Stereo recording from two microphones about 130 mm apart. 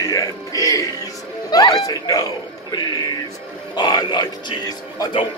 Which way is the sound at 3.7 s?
30° left (ahead or behind).